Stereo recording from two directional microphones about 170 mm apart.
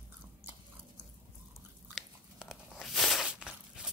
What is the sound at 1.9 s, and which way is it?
Biting, centre (ahead or behind).